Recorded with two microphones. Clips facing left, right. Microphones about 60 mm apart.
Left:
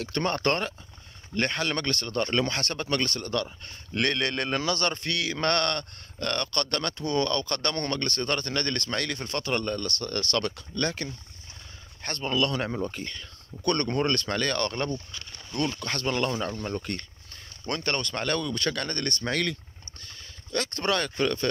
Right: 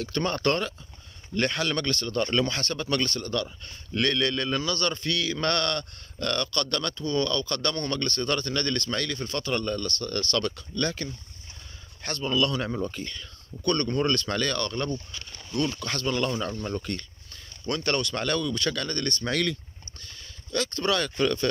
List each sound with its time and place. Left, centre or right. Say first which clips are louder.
0.0 s speech: even; left
1.9 s speech: right 1 dB; left
9.8 s speech: right 1 dB; left
12.0 s speech: right 1 dB; left
13.7 s speech: even; left
13.9 s speech: right 1 dB; left
17.7 s speech: right 2 dB; left
19.2 s speech: right 1 dB; left
20.5 s speech: right 1 dB; left
21.0 s speech: right 1 dB; left